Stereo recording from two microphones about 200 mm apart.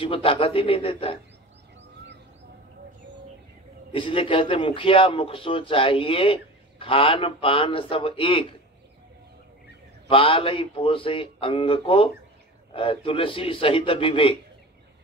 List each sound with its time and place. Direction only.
0.0 s a man's voice: 25° left (ahead or behind)
3.9 s a man's voice: 25° left (ahead or behind)
10.0 s a man's voice: 25° left (ahead or behind)